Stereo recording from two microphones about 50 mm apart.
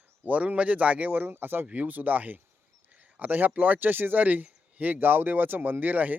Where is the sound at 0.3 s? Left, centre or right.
Right.